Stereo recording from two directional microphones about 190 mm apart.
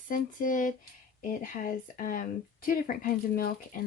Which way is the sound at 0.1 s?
45° left (ahead or behind).